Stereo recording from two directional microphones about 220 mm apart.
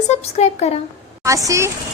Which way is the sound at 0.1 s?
30° left (ahead or behind).